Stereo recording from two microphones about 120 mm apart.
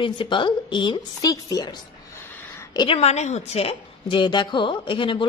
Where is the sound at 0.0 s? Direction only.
45° left (ahead or behind).